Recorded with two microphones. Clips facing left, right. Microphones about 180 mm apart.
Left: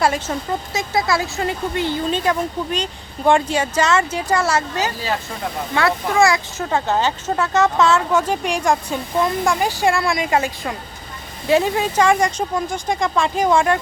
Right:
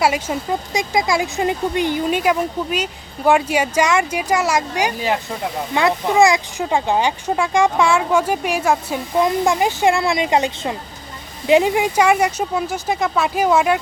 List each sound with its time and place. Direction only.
0.0 s speech: 10° right (ahead or behind)
9.1 s speech: 20° right (ahead or behind)